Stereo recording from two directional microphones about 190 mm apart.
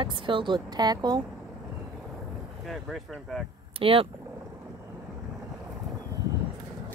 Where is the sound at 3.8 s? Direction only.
30° right (ahead or behind).